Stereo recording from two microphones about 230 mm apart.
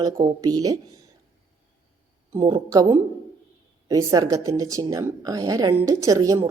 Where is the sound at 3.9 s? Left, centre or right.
Centre.